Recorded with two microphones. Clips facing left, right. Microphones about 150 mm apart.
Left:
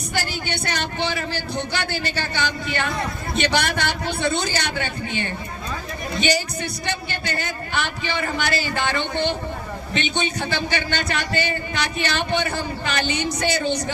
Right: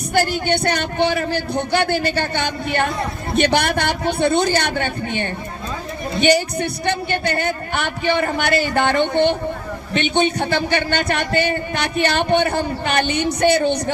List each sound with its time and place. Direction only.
0.1 s speech: 55° right (ahead or behind)